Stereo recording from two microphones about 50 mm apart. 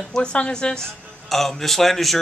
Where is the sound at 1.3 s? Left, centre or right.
Centre.